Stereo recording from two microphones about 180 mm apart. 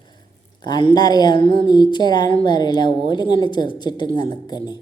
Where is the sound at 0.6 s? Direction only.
25° left (ahead or behind).